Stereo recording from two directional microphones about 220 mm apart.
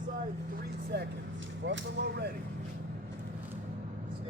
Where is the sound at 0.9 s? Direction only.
50° right (ahead or behind).